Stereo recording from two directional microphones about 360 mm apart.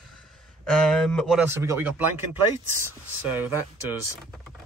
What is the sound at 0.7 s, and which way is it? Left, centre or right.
A man's voice, centre.